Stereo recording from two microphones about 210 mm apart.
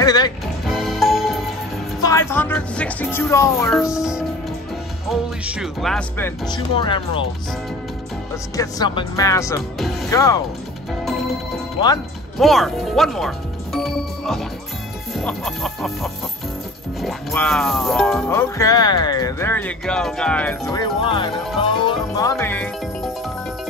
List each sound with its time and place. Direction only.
0.0 s music: 20° left (ahead or behind)
0.7 s music: centre (ahead or behind)
2.0 s speech: 15° left (ahead or behind)
3.9 s speech: 5° right (ahead or behind)
5.4 s speech: 5° right (ahead or behind); by 7.2 s 25° left (ahead or behind)
8.5 s speech: 20° left (ahead or behind)
12.4 s speech: centre (ahead or behind)
13.8 s music: centre (ahead or behind)
15.1 s speech: centre (ahead or behind)
17.3 s speech: 5° left (ahead or behind)
18.3 s speech: 15° left (ahead or behind)